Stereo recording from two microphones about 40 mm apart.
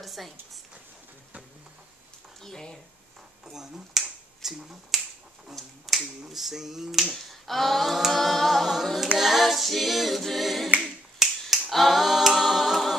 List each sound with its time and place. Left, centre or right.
0.0 s a sound: centre
2.4 s speech: centre
3.5 s finger snapping: centre
5.5 s speech: centre
8.8 s a capella: centre
11.1 s finger snapping: centre
11.7 s a capella: centre